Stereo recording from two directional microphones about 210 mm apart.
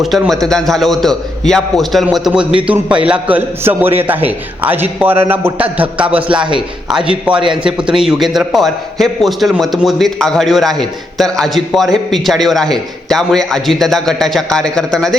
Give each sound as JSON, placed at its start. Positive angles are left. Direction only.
{"t": 0.0, "sound": "a man's voice", "side_deg": 0}